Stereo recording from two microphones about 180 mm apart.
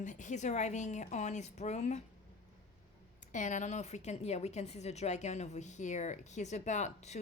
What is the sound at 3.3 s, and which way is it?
A woman's voice, 45° left (ahead or behind).